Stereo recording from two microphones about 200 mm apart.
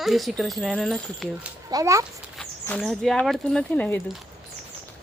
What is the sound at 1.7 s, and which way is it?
Speech, 15° right (ahead or behind).